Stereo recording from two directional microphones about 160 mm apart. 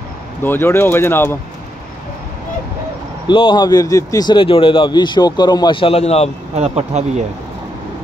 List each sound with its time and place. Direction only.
0.4 s speech: 15° left (ahead or behind)
3.3 s speech: 30° left (ahead or behind)
6.5 s speech: 40° right (ahead or behind)